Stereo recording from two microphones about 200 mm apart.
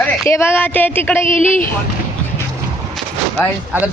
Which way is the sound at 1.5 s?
40° left (ahead or behind).